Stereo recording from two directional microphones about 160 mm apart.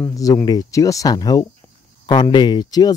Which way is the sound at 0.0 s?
20° left (ahead or behind).